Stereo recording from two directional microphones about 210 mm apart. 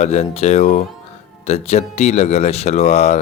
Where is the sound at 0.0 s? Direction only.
30° left (ahead or behind).